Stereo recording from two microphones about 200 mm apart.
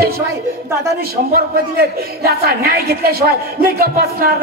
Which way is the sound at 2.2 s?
50° right (ahead or behind).